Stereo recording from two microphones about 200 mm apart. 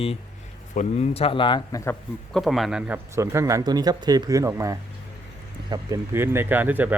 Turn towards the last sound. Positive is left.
turn(degrees=-10)  # may be behind; listen again after turning